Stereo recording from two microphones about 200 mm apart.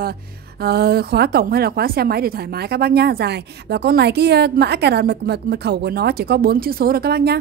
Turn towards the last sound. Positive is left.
turn(degrees=-55)  # may be behind; listen again after turning